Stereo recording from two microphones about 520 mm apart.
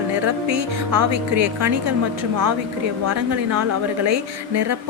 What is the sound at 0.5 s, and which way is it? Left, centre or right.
A woman's voice, right.